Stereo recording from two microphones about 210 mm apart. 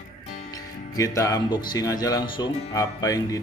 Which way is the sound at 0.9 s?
15° left (ahead or behind).